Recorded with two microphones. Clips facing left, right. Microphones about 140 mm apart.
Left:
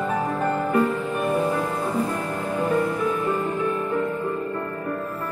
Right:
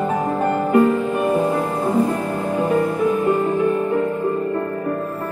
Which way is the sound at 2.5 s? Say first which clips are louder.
Right 4 dB; 30° right (ahead or behind).